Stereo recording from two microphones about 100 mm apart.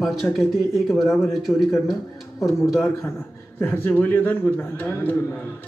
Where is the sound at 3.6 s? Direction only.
20° left (ahead or behind).